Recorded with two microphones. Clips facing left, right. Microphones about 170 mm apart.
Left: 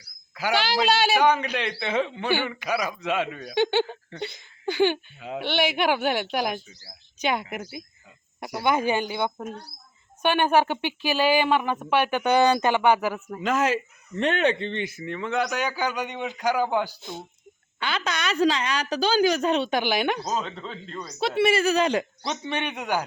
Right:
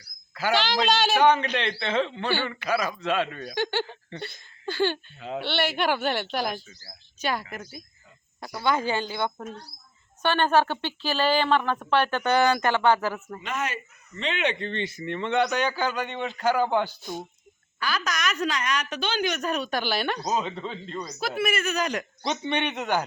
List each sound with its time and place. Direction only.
0.3 s a man's voice: 10° left (ahead or behind)
3.5 s a woman's voice: 20° left (ahead or behind)
4.1 s speech: 5° left (ahead or behind)
4.6 s a man's voice: 15° left (ahead or behind)
13.4 s speech: 90° left
14.6 s a man's voice: 15° left (ahead or behind)
17.7 s a woman's voice: 25° left (ahead or behind)
20.2 s speech: 5° right (ahead or behind)
21.2 s a woman's voice: 30° left (ahead or behind)
22.2 s a man's voice: centre (ahead or behind)